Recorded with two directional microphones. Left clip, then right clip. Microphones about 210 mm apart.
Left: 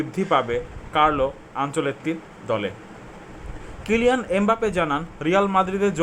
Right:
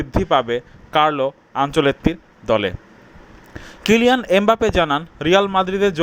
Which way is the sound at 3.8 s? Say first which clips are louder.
Right 5 dB; 35° right (ahead or behind).